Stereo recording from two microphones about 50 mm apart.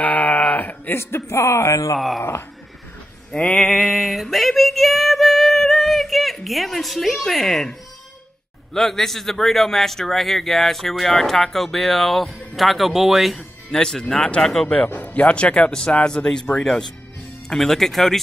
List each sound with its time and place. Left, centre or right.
0.0 s a sound: left
0.9 s speech: left
2.0 s speech: centre
3.3 s female singing: centre
8.7 s speech: centre
14.9 s speech: left; by 18.2 s centre